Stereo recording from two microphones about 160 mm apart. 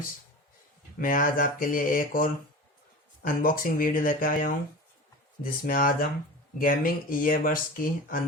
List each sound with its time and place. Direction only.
0.9 s speech: 60° left (ahead or behind)